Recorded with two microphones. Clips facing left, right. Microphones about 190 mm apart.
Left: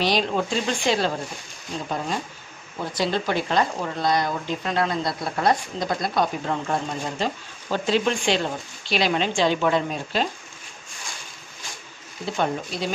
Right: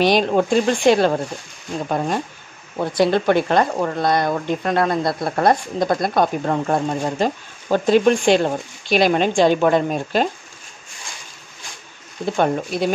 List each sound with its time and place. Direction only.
0.0 s speech: 55° right (ahead or behind)
12.4 s speech: 55° right (ahead or behind)